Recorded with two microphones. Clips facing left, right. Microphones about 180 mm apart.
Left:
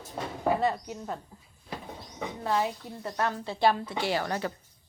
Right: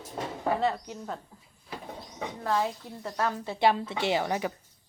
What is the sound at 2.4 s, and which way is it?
Speech, 10° left (ahead or behind).